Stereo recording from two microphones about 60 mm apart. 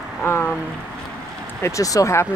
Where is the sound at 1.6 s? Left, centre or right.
Left.